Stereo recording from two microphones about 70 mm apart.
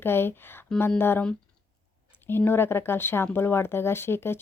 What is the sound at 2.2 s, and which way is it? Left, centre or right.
Speech, left.